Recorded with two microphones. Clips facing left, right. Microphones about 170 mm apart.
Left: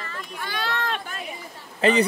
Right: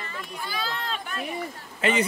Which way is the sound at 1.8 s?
35° left (ahead or behind).